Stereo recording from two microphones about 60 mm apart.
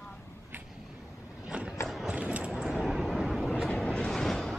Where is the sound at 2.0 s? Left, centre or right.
Right.